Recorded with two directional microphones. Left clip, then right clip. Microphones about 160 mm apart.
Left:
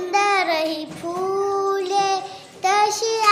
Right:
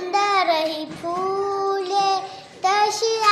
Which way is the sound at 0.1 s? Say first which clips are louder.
Even; 15° left (ahead or behind).